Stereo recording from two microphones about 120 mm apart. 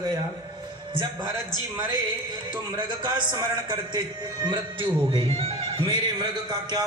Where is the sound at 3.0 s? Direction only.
40° right (ahead or behind).